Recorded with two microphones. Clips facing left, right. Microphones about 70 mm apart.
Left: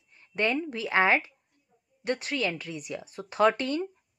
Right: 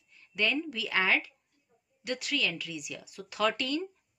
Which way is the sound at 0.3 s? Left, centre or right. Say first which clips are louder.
Left 3 dB; left.